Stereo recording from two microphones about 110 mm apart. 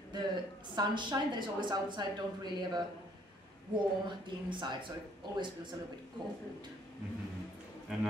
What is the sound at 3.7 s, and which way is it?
A woman's voice, 45° right (ahead or behind).